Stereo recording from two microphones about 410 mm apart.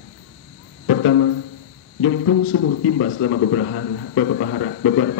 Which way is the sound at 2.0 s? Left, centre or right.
Left.